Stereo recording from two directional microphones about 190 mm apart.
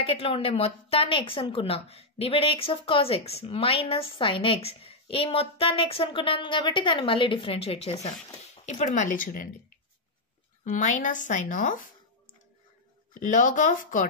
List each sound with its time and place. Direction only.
0.0 s a woman's voice: 30° left (ahead or behind); by 9.5 s 45° left (ahead or behind)
10.6 s a woman's voice: 40° left (ahead or behind)
13.2 s a woman's voice: 45° left (ahead or behind)